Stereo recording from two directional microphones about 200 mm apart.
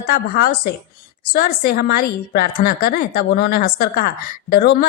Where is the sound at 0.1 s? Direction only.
50° left (ahead or behind).